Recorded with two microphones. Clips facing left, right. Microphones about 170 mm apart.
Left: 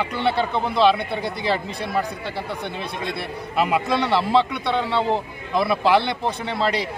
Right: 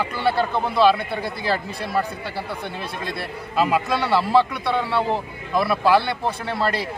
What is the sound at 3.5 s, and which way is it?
A man's voice, 20° left (ahead or behind).